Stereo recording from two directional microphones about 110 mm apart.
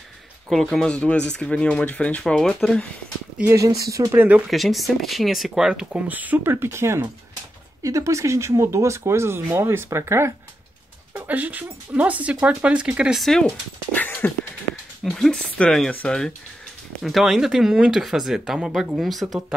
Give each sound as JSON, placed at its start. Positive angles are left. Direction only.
{"t": 0.5, "sound": "speech", "side_deg": 0}
{"t": 3.5, "sound": "speech", "side_deg": -30}
{"t": 4.5, "sound": "speech", "side_deg": 0}
{"t": 11.1, "sound": "speech", "side_deg": -15}
{"t": 13.2, "sound": "speech", "side_deg": 5}
{"t": 13.5, "sound": "speech", "side_deg": 15}